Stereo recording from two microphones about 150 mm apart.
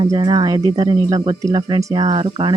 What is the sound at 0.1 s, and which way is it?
Speech, 30° right (ahead or behind).